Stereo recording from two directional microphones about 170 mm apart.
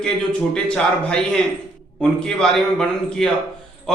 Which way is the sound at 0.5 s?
5° left (ahead or behind).